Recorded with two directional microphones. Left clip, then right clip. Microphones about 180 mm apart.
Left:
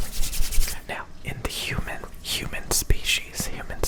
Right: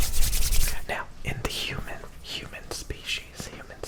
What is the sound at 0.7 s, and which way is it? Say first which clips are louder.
Whispering: right 1 dB; 10° right (ahead or behind).